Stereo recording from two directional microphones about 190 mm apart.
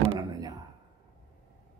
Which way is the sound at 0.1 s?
20° right (ahead or behind).